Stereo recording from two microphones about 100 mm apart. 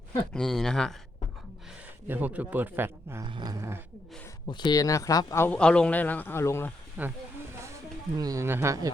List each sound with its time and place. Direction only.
0.3 s speech: 5° left (ahead or behind)
2.0 s a man's voice: 15° right (ahead or behind)
3.2 s a sound: 55° right (ahead or behind)
3.5 s speech: 30° right (ahead or behind)
4.4 s speech: 50° left (ahead or behind); by 5.5 s 30° left (ahead or behind)
5.5 s a man's voice: 10° left (ahead or behind)
7.0 s a man's voice: 15° right (ahead or behind)
8.2 s a man's voice: 40° right (ahead or behind)
8.4 s a man's voice: 25° right (ahead or behind)